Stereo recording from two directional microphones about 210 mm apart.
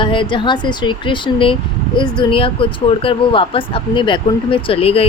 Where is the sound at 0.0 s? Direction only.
25° left (ahead or behind).